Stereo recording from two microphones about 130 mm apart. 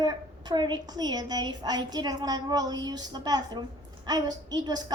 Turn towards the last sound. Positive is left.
turn(degrees=-30)  # may be behind; listen again after turning